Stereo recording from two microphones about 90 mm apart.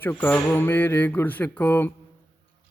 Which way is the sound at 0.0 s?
20° left (ahead or behind).